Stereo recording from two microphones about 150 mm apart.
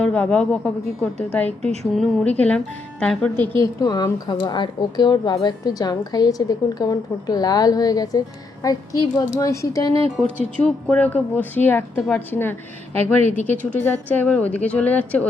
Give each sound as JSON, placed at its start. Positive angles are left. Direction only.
{"t": 0.0, "sound": "speech", "side_deg": 10}
{"t": 3.6, "sound": "a woman's voice", "side_deg": 25}
{"t": 10.7, "sound": "speech", "side_deg": 5}